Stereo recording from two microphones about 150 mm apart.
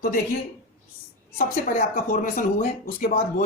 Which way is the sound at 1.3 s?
70° left (ahead or behind).